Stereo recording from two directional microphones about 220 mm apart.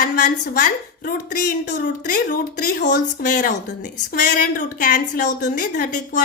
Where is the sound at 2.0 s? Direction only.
40° left (ahead or behind).